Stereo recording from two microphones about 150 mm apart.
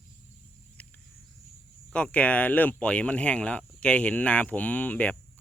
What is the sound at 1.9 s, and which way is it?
Speech, 10° left (ahead or behind).